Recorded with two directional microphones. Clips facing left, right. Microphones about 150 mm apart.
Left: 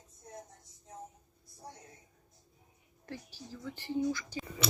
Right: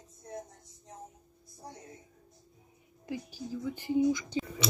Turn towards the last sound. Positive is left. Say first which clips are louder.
# right 6 dB
turn(degrees=-15)  # may be behind; listen again after turning